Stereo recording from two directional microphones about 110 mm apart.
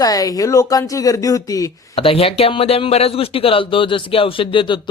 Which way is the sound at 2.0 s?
60° left (ahead or behind).